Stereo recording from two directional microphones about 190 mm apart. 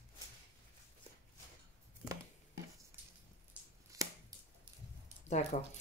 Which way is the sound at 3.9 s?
15° right (ahead or behind).